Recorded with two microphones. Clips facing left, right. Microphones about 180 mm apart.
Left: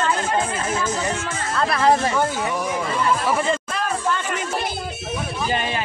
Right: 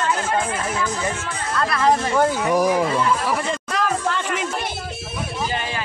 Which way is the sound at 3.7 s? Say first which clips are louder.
Right 1 dB; 85° right.